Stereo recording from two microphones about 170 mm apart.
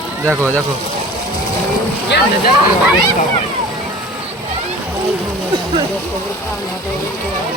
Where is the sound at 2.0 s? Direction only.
80° left.